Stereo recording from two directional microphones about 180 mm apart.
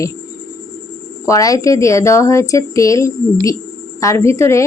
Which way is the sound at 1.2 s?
20° left (ahead or behind).